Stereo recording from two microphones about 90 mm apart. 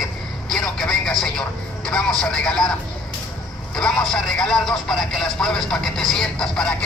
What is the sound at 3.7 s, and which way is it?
Speech, 5° left (ahead or behind).